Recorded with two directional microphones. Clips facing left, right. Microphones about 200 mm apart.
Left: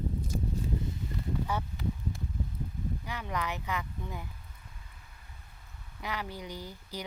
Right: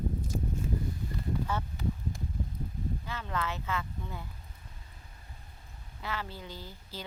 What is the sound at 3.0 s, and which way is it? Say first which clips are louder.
Speech: left 1 dB; 15° left (ahead or behind).